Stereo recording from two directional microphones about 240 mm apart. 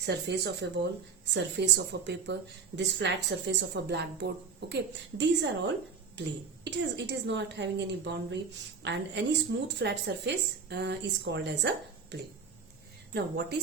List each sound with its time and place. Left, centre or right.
0.0 s speech: right
6.7 s speech: right